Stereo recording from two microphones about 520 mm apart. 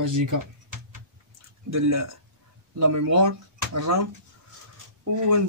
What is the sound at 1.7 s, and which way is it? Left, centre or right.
Speech, right.